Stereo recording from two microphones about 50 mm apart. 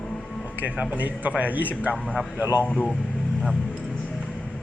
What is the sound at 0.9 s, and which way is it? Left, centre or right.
Speech, right.